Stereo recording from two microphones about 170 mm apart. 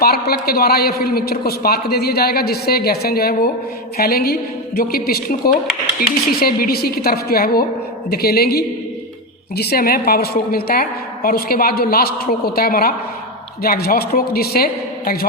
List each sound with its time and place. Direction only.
0.0 s a man's voice: 65° left (ahead or behind)